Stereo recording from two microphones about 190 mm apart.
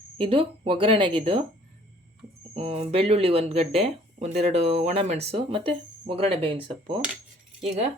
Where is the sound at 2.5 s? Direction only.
30° right (ahead or behind).